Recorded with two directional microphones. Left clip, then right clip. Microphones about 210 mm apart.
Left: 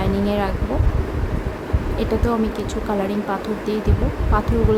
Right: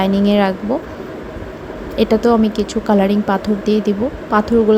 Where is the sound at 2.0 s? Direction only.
25° right (ahead or behind).